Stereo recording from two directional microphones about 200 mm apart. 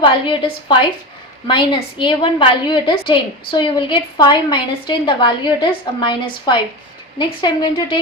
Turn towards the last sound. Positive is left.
turn(degrees=20)  # may be behind; listen again after turning